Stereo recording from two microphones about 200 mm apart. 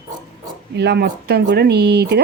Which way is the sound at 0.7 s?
55° right (ahead or behind).